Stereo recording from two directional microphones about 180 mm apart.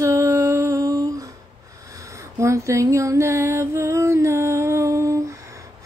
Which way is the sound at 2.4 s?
15° right (ahead or behind).